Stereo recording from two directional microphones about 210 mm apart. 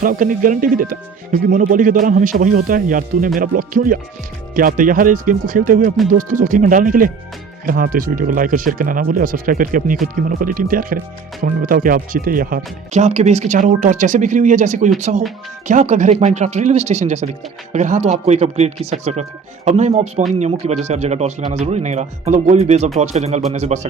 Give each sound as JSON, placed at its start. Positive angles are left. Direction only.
{"t": 0.0, "sound": "speech", "side_deg": -40}